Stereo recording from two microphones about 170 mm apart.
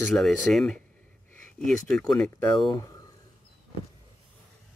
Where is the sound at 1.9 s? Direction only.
5° left (ahead or behind).